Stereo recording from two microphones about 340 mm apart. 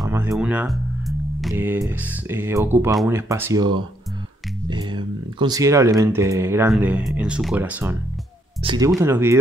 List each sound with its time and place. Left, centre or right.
0.0 s speech: centre